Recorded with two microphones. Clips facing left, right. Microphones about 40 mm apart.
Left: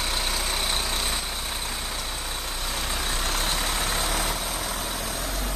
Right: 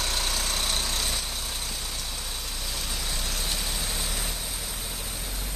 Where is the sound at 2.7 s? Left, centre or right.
Left.